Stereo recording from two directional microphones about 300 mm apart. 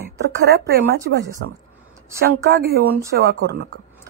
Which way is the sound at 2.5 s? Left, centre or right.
Right.